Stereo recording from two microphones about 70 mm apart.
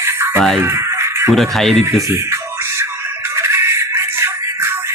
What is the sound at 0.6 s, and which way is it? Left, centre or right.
Music, right.